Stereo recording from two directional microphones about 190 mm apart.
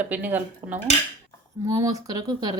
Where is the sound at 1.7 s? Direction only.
20° right (ahead or behind).